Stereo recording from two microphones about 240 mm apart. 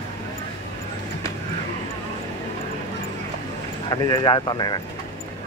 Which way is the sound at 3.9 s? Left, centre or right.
Centre.